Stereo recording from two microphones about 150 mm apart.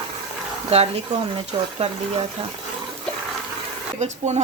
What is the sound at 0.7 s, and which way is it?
Speech, 45° right (ahead or behind).